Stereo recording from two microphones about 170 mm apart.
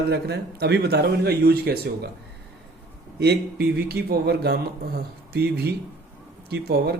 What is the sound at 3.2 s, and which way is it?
Speech, 70° right (ahead or behind).